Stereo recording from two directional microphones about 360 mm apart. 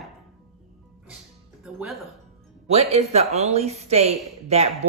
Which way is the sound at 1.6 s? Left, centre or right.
Centre.